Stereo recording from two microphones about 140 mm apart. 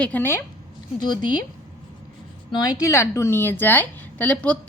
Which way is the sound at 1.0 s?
30° left (ahead or behind).